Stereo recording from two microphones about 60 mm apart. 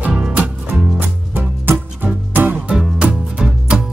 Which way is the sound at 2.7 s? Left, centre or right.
Centre.